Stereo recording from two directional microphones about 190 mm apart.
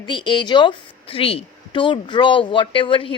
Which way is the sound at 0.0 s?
25° left (ahead or behind).